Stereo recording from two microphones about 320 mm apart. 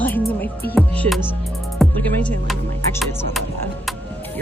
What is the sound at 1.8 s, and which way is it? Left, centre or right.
Music, centre.